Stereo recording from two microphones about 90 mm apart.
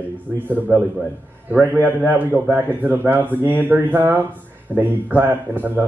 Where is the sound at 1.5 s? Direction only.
20° right (ahead or behind).